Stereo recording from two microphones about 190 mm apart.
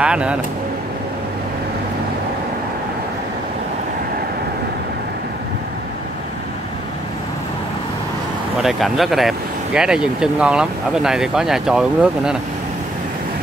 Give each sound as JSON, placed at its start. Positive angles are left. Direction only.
{"t": 0.0, "sound": "speech", "side_deg": -5}
{"t": 8.5, "sound": "speech", "side_deg": 0}